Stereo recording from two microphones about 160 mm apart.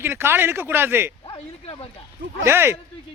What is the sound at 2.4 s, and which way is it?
Speech, 15° right (ahead or behind).